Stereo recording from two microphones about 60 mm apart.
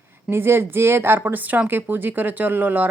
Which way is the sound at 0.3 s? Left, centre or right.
Right.